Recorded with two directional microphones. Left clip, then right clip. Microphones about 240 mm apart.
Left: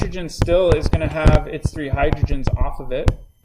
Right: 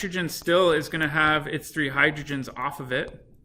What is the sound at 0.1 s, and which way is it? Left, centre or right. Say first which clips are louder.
Speech: left 3 dB; centre.